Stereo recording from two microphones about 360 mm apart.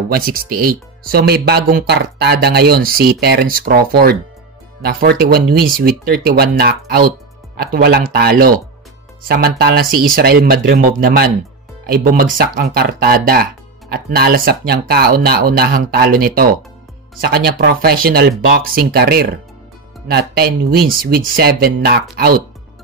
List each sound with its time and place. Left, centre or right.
0.1 s speech: right